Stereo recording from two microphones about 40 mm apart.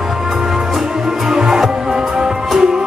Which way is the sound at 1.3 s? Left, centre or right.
Centre.